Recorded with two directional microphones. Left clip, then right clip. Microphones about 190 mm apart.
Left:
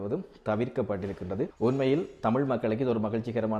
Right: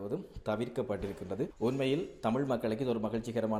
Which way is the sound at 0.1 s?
25° left (ahead or behind).